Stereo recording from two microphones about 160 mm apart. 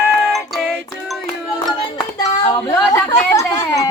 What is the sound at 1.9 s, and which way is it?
Hands, 25° left (ahead or behind).